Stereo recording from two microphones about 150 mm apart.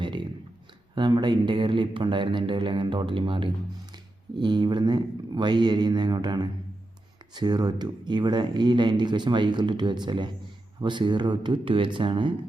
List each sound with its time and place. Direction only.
0.9 s speech: 30° right (ahead or behind)